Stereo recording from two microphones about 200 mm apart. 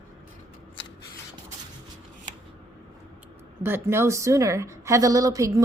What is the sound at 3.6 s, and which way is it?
A woman's voice, 10° right (ahead or behind).